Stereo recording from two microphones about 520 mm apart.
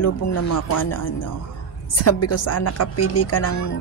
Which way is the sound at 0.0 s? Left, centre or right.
Left.